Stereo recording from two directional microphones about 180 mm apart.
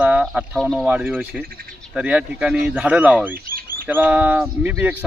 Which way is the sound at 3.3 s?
55° right (ahead or behind).